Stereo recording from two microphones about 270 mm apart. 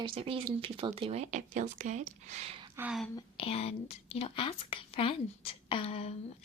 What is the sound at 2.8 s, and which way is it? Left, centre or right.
Speech, centre.